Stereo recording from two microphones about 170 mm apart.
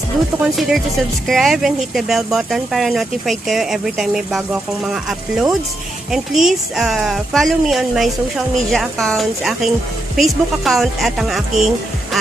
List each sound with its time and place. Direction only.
0.4 s speech: centre (ahead or behind)